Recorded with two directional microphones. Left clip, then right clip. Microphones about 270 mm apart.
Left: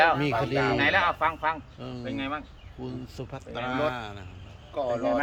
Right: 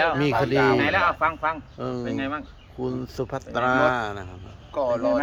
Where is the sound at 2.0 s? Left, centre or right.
Centre.